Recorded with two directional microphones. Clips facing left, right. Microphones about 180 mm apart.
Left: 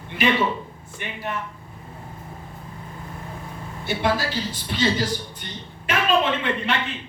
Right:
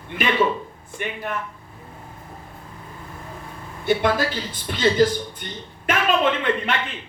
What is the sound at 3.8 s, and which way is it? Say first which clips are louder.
Speech: right 4 dB; 50° right (ahead or behind).